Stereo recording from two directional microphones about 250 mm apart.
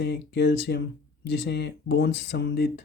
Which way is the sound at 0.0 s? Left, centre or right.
Left.